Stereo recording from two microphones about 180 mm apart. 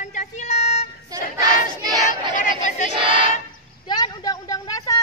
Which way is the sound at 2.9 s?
30° right (ahead or behind).